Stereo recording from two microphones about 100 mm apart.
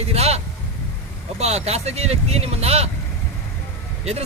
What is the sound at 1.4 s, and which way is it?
Speech, 90° right.